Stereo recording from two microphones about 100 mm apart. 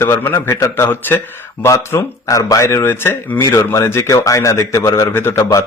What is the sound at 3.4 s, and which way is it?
A man's voice, 35° left (ahead or behind).